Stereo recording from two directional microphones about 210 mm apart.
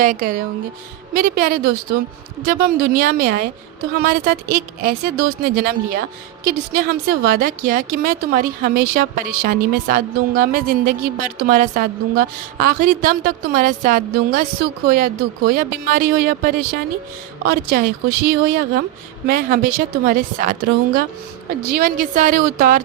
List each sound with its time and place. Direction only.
0.0 s speech: 40° right (ahead or behind)